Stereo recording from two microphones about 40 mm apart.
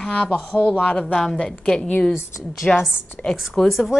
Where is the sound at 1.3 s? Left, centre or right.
Left.